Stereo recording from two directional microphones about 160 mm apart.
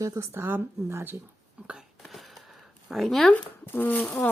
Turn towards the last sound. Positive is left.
turn(degrees=5)  # may be behind; listen again after turning